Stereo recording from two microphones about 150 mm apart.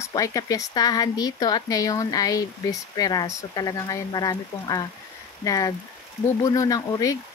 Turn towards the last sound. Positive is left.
turn(degrees=25)  # may be behind; listen again after turning